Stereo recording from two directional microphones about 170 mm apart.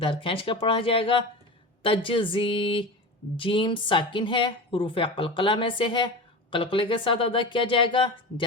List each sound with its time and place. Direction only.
0.0 s a woman's voice: 30° left (ahead or behind)